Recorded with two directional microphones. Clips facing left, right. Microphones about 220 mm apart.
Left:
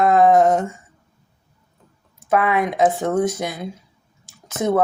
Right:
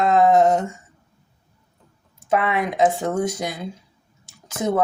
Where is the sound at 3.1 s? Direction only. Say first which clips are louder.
Left 3 dB; 25° left (ahead or behind).